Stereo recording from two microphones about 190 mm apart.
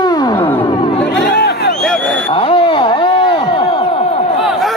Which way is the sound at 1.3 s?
55° left (ahead or behind).